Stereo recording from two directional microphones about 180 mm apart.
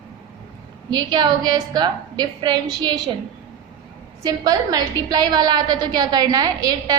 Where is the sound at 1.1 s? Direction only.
25° right (ahead or behind).